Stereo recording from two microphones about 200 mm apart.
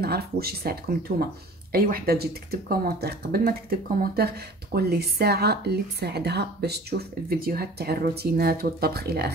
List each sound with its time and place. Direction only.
0.0 s a woman's voice: 50° right (ahead or behind)